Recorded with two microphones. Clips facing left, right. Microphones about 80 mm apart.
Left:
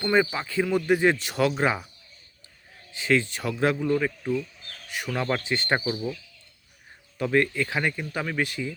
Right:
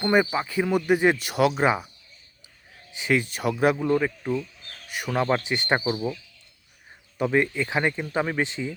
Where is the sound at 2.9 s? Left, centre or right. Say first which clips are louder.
Left 1 dB; centre.